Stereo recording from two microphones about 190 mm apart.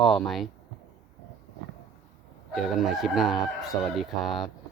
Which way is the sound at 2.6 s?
Centre (ahead or behind).